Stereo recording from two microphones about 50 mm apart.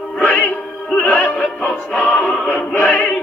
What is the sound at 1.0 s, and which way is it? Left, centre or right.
Music, left.